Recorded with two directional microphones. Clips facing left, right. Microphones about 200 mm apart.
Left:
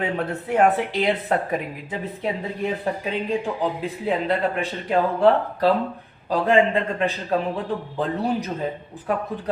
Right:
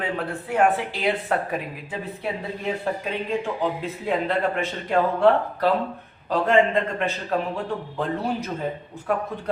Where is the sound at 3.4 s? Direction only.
15° left (ahead or behind).